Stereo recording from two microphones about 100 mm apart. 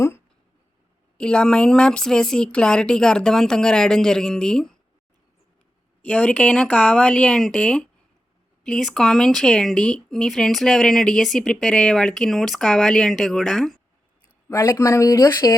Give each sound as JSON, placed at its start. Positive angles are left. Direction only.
{"t": 1.2, "sound": "speech", "side_deg": 10}
{"t": 6.0, "sound": "speech", "side_deg": 15}
{"t": 14.5, "sound": "speech", "side_deg": 30}